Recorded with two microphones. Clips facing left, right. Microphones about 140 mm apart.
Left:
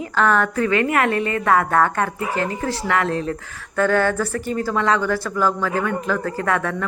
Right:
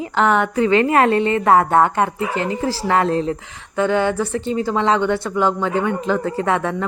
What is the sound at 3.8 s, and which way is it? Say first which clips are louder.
Speech: right 1 dB; 20° right (ahead or behind).